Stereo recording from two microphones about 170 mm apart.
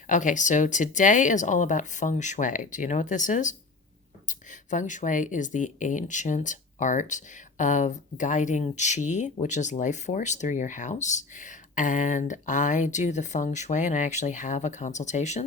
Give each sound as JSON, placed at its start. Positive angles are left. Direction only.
{"t": 0.1, "sound": "speech", "side_deg": 50}